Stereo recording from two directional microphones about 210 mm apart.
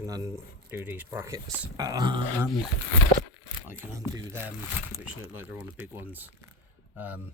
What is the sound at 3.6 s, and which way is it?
Speech, 10° right (ahead or behind).